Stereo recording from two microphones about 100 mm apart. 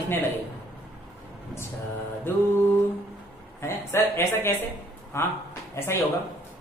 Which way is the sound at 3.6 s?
25° left (ahead or behind).